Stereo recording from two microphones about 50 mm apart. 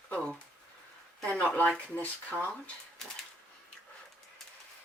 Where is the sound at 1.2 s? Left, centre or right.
Centre.